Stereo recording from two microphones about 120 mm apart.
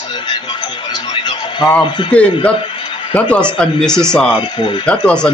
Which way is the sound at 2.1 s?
10° left (ahead or behind).